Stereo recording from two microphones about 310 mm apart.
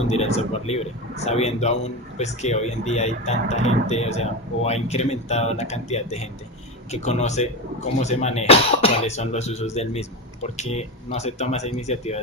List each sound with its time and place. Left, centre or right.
0.0 s a man's voice: left